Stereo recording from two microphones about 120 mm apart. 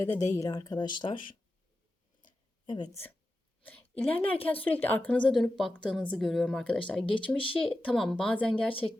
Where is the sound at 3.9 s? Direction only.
50° left (ahead or behind).